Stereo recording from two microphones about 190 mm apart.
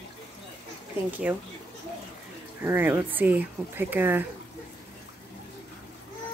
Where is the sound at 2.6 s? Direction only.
10° right (ahead or behind).